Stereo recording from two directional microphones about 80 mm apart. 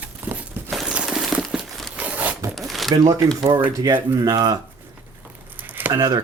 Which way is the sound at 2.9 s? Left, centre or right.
Right.